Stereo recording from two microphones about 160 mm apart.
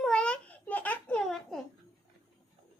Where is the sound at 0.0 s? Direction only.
5° left (ahead or behind).